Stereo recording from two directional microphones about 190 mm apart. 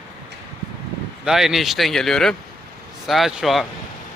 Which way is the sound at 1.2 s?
Centre (ahead or behind).